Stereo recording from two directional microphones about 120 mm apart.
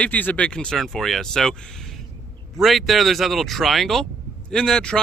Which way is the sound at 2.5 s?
Centre (ahead or behind).